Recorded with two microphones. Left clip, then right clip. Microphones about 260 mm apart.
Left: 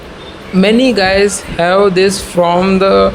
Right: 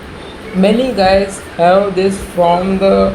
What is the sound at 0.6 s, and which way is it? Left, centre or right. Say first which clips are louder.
Speech: left 2 dB; left.